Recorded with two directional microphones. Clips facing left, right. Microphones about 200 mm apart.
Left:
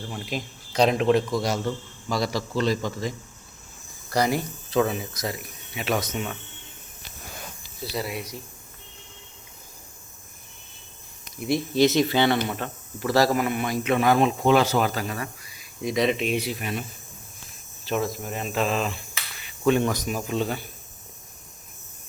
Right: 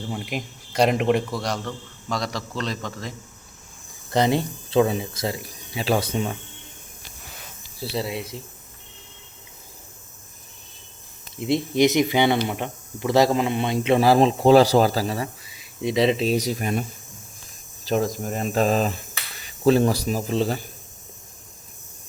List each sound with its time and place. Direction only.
0.1 s a man's voice: 15° right (ahead or behind)
2.0 s a man's voice: 5° left (ahead or behind)
4.1 s speech: 25° right (ahead or behind)
7.8 s speech: 30° right (ahead or behind)
11.3 s speech: 25° right (ahead or behind); by 16.8 s 40° right (ahead or behind)
17.8 s speech: 40° right (ahead or behind)